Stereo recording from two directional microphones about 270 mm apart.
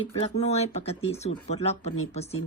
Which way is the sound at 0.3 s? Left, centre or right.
Left.